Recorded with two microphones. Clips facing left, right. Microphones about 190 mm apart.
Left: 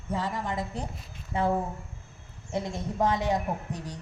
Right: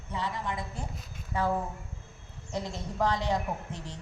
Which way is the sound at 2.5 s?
20° left (ahead or behind).